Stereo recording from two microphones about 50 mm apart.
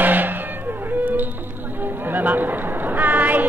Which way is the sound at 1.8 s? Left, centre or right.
Right.